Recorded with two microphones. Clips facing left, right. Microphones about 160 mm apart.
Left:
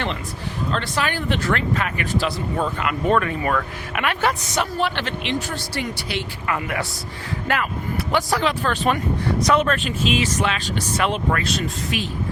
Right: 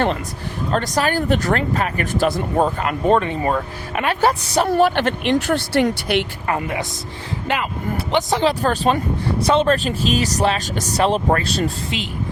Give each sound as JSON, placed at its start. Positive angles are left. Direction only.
{"t": 0.7, "sound": "speech", "side_deg": -40}
{"t": 4.8, "sound": "speech", "side_deg": -45}
{"t": 6.4, "sound": "speech", "side_deg": -35}
{"t": 7.4, "sound": "speech", "side_deg": -20}
{"t": 8.4, "sound": "speech", "side_deg": -35}